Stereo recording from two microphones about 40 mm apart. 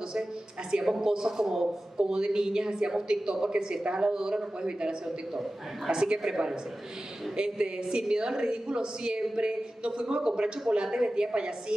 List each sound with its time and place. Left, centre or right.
0.1 s speech: right
5.0 s a man's voice: centre